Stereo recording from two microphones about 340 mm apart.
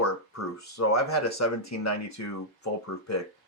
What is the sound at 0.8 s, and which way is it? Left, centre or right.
Speech, left.